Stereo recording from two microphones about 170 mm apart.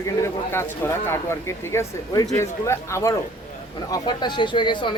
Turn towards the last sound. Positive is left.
turn(degrees=25)  # may be behind; listen again after turning